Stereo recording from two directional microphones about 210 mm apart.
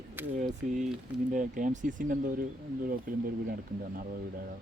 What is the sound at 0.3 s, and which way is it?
Speech, 35° right (ahead or behind).